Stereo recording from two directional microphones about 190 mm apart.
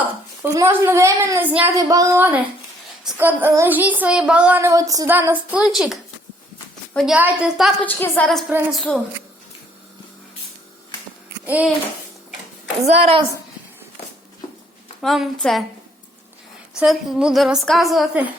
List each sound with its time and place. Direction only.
0.4 s a woman's voice: 15° right (ahead or behind)
7.9 s a woman's voice: 10° left (ahead or behind)
11.4 s speech: 10° right (ahead or behind)
12.8 s a woman's voice: 35° right (ahead or behind)
15.0 s a woman's voice: centre (ahead or behind)
16.8 s a woman's voice: centre (ahead or behind)